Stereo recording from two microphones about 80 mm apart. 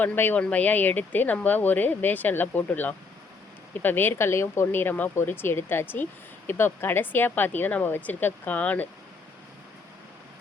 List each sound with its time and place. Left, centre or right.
0.0 s speech: left